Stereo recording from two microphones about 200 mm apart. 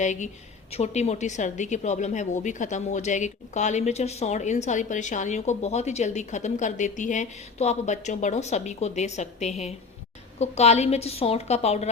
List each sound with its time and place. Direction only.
0.0 s a woman's voice: 35° left (ahead or behind)